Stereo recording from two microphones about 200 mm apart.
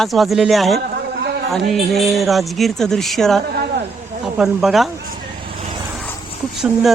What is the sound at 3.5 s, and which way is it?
Speech, 50° right (ahead or behind).